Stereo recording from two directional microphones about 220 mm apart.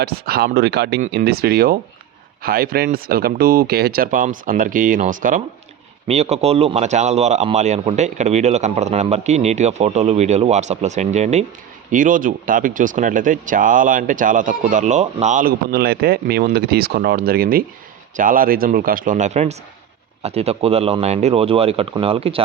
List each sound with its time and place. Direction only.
0.0 s speech: 45° right (ahead or behind); by 22.4 s 25° right (ahead or behind)